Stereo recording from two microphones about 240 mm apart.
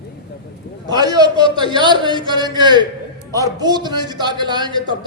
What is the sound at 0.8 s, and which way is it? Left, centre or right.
A man's voice, centre.